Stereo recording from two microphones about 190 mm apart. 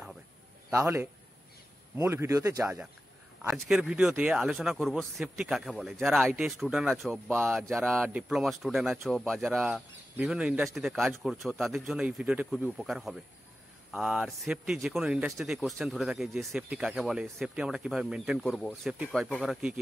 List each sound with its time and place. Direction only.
0.7 s a man's voice: 15° right (ahead or behind)
3.5 s speech: centre (ahead or behind)